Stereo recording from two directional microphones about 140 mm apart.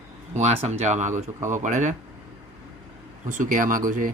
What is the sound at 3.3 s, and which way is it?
Speech, 65° right (ahead or behind).